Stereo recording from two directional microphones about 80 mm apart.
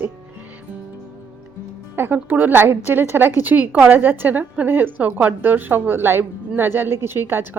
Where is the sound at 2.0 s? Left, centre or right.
Right.